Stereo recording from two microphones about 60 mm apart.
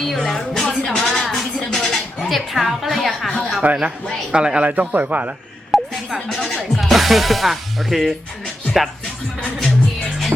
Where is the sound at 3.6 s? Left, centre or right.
Right.